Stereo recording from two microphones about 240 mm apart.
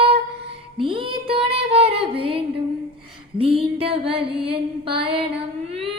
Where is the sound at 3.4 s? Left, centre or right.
Right.